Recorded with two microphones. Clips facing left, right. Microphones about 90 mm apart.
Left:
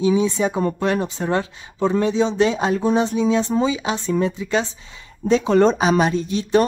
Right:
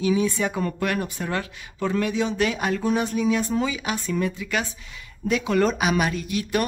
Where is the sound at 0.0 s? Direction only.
20° left (ahead or behind).